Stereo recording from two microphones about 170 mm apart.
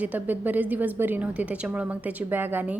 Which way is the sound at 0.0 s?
10° right (ahead or behind).